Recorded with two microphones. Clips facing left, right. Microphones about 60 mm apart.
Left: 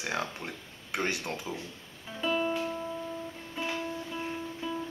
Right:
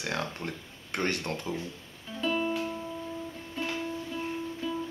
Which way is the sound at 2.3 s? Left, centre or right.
Centre.